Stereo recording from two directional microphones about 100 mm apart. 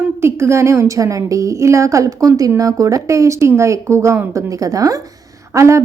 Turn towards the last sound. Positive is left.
turn(degrees=-30)  # may be behind; listen again after turning